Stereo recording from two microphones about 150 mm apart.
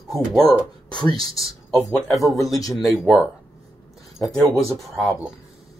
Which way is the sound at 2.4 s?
25° left (ahead or behind).